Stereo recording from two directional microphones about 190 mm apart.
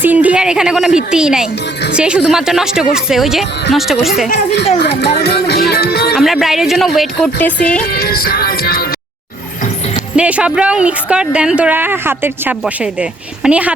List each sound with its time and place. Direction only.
0.0 s speech: 10° right (ahead or behind)
4.8 s music: 60° left (ahead or behind)
6.1 s speech: centre (ahead or behind)
7.9 s music: 50° left (ahead or behind)
9.6 s music: 35° left (ahead or behind)
10.2 s speech: 5° right (ahead or behind)